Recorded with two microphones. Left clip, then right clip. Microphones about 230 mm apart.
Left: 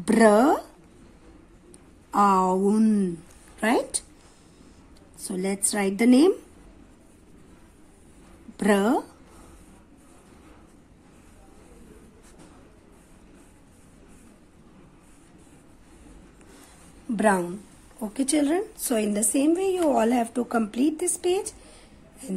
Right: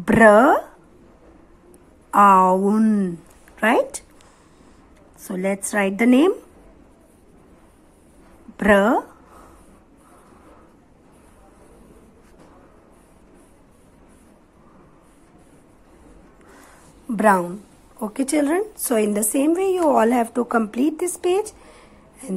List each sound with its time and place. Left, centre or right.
0.0 s a woman's voice: centre
2.0 s a sound: centre
2.5 s a woman's voice: centre
5.2 s a woman's voice: centre
8.5 s a sound: centre
17.1 s a woman's voice: centre